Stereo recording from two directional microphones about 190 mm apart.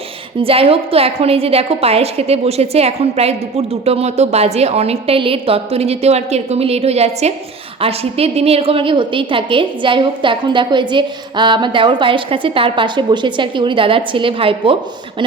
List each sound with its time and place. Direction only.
0.3 s a woman's voice: 30° right (ahead or behind)